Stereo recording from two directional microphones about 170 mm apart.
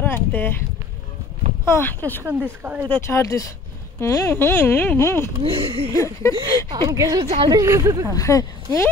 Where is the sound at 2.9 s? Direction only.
15° left (ahead or behind).